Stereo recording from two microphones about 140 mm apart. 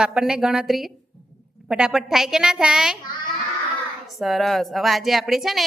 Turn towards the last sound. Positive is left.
turn(degrees=0)  # may be behind; listen again after turning